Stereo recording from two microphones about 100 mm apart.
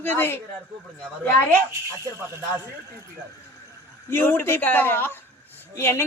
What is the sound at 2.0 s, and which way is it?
Speech, 30° right (ahead or behind).